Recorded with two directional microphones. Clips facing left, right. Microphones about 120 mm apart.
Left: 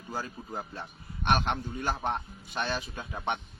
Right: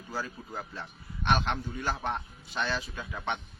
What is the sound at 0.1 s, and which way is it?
A man's voice, 15° left (ahead or behind).